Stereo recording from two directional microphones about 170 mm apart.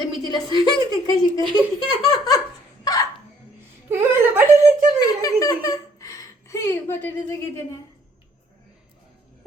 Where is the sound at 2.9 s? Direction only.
20° left (ahead or behind).